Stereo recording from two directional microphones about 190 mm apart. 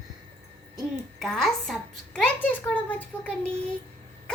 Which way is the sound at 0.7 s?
Centre (ahead or behind).